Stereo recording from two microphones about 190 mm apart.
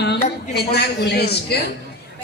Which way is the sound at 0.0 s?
60° left (ahead or behind).